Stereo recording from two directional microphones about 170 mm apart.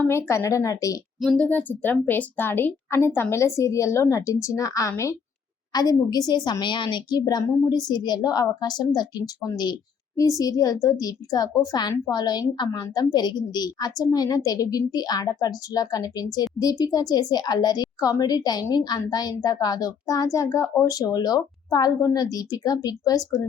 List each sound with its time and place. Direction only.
0.1 s a woman's voice: 15° left (ahead or behind)
1.2 s a woman's voice: 5° left (ahead or behind); by 23.4 s 20° left (ahead or behind)